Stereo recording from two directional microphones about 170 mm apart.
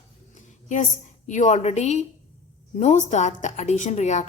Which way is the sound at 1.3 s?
45° left (ahead or behind).